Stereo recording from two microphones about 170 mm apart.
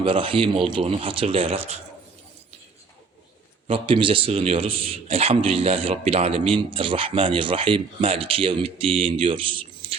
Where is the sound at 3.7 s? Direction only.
30° right (ahead or behind).